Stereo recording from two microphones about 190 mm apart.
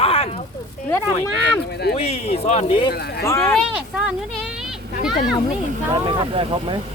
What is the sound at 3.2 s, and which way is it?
Speech, 15° left (ahead or behind).